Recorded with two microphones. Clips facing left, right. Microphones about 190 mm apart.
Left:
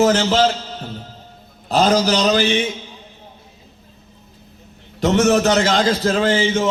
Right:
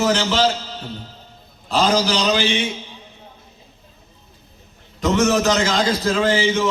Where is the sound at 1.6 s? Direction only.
40° left (ahead or behind).